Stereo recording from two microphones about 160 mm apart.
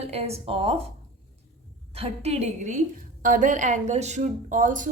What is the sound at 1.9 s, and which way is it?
A woman's voice, 40° right (ahead or behind).